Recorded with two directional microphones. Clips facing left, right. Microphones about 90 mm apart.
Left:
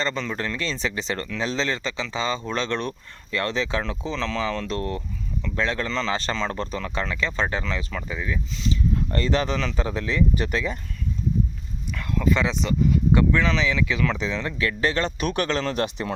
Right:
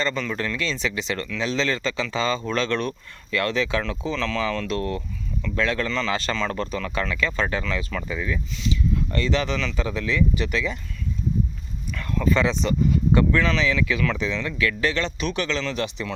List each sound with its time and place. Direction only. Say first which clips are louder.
0.0 s speech: right 1 dB; 30° left (ahead or behind)
7.9 s speech: right 2 dB; 15° left (ahead or behind)
8.6 s speech: even; 40° left (ahead or behind)
11.9 s speech: right 1 dB; 10° left (ahead or behind); by 16.1 s 50° left (ahead or behind)